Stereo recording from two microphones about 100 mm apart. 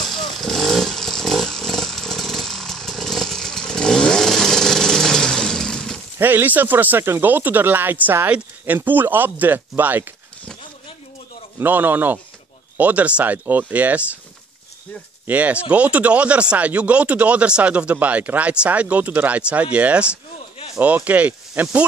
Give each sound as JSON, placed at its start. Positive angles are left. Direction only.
{"t": 0.4, "sound": "chainsaw", "side_deg": 5}
{"t": 6.1, "sound": "speech", "side_deg": -20}
{"t": 11.6, "sound": "speech", "side_deg": -20}
{"t": 15.2, "sound": "speech", "side_deg": -15}